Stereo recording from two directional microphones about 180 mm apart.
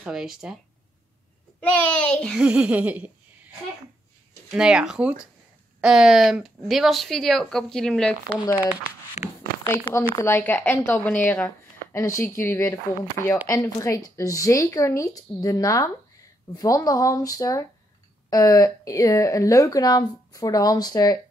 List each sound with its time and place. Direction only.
0.0 s speech: centre (ahead or behind)
1.6 s speech: 5° left (ahead or behind)
2.4 s a sound: 5° right (ahead or behind)
4.6 s speech: 5° right (ahead or behind)
10.0 s speech: 15° left (ahead or behind)